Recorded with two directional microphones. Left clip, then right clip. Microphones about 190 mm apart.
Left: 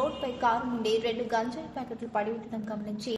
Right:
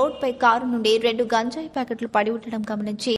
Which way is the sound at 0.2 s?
45° right (ahead or behind).